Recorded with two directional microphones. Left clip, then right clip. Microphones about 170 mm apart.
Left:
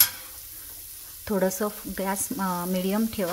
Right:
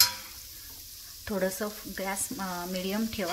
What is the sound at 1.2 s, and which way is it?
Speech, 35° left (ahead or behind).